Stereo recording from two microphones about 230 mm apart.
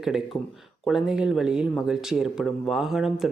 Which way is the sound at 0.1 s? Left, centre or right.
Centre.